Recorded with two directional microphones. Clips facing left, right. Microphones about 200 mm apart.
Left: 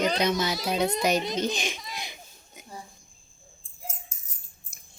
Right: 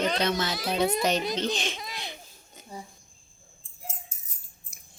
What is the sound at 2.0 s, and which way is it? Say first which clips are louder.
Oink: right 1 dB; 10° left (ahead or behind).